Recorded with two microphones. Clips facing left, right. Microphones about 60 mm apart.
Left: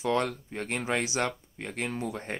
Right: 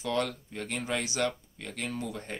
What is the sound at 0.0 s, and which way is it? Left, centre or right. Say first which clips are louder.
Speech: left 3 dB; left.